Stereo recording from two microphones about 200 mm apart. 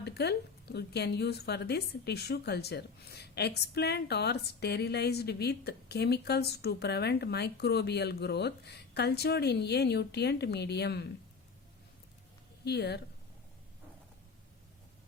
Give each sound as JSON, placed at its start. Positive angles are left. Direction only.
{"t": 0.0, "sound": "a woman's voice", "side_deg": 55}
{"t": 12.6, "sound": "a woman's voice", "side_deg": 55}